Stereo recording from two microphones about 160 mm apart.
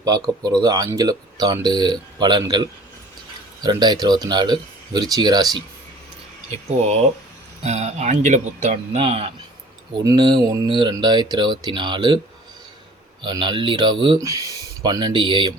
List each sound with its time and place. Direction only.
0.0 s speech: 25° right (ahead or behind)
6.7 s speech: 45° right (ahead or behind)
10.0 s speech: 25° right (ahead or behind)
13.2 s speech: 30° right (ahead or behind)
14.2 s speech: 20° right (ahead or behind)